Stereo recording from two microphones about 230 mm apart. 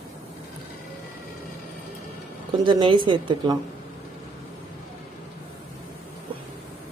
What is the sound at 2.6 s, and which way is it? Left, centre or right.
Speech, centre.